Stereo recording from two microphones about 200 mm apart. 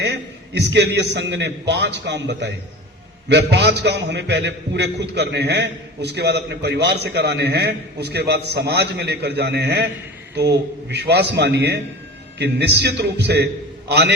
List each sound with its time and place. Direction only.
0.0 s a man's voice: 55° right (ahead or behind)